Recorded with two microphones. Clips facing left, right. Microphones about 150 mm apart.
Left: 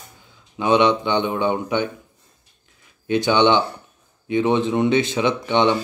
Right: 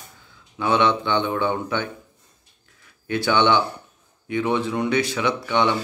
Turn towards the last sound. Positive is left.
turn(degrees=20)  # may be behind; listen again after turning